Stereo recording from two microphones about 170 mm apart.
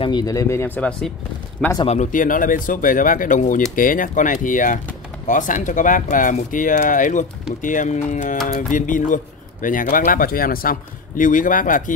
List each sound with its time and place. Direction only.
0.0 s speech: 25° left (ahead or behind); by 1.1 s 10° left (ahead or behind)
1.8 s speech: 40° left (ahead or behind)